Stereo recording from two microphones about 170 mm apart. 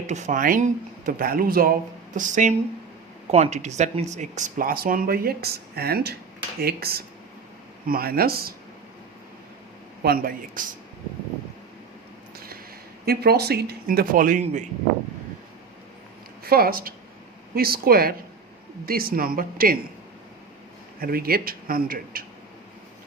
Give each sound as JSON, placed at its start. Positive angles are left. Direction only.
{"t": 0.1, "sound": "speech", "side_deg": -45}
{"t": 10.0, "sound": "speech", "side_deg": -60}
{"t": 13.1, "sound": "speech", "side_deg": -70}
{"t": 16.4, "sound": "speech", "side_deg": -60}
{"t": 21.0, "sound": "speech", "side_deg": -60}